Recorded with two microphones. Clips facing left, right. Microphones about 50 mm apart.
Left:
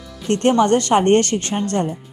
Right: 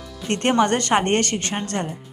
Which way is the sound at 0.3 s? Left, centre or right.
Right.